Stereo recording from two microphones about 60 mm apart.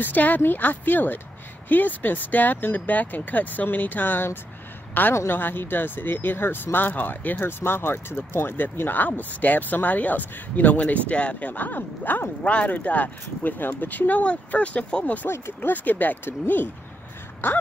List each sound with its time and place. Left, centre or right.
0.0 s speech: left
15.2 s speech: left
15.7 s speech: left